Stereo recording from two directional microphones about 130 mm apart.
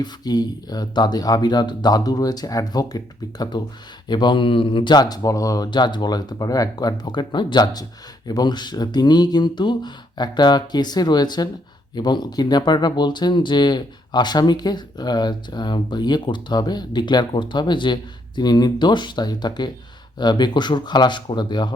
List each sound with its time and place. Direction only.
0.0 s speech: 30° left (ahead or behind)